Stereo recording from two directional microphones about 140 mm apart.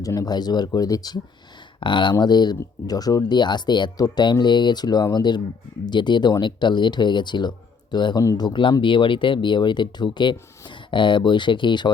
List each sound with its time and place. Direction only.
0.0 s speech: 25° left (ahead or behind)